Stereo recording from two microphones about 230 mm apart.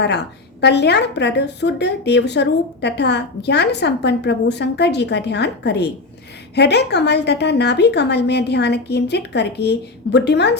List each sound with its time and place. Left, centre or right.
0.6 s a woman's voice: left